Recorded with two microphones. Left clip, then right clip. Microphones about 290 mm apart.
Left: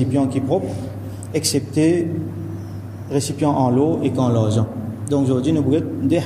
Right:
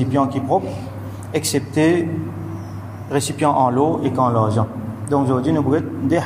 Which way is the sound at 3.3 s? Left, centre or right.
Right.